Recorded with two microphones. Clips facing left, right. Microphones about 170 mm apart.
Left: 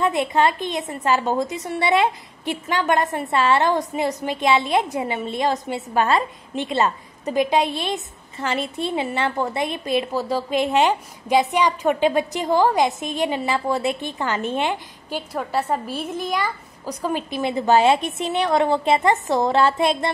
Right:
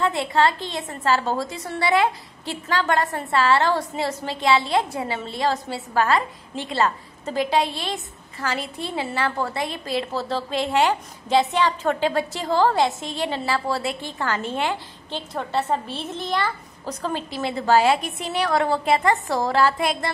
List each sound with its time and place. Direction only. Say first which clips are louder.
0.0 s a woman's voice: left 1 dB; 20° left (ahead or behind)
15.0 s a woman's voice: left 2 dB; 10° left (ahead or behind); by 20.1 s 25° left (ahead or behind)